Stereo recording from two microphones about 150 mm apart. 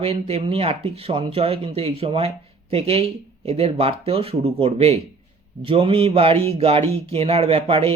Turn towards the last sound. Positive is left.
turn(degrees=-40)  # may be behind; listen again after turning